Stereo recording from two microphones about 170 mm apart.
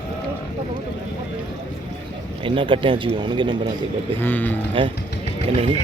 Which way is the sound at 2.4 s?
30° right (ahead or behind).